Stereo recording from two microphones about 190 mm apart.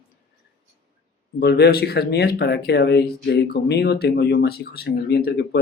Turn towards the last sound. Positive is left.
turn(degrees=60)  # may be behind; listen again after turning